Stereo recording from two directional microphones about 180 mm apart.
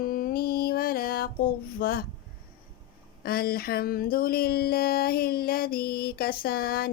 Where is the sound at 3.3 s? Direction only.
55° left (ahead or behind).